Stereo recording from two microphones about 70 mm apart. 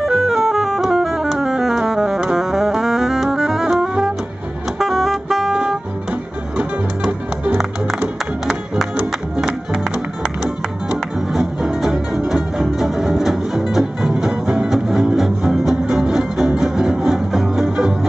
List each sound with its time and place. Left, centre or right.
0.0 s music: centre
7.1 s music: centre
9.4 s music: centre